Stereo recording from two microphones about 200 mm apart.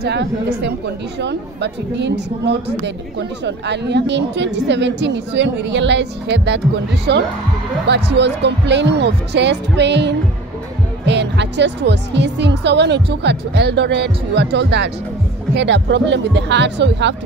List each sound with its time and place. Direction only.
0.0 s speech: 55° right (ahead or behind)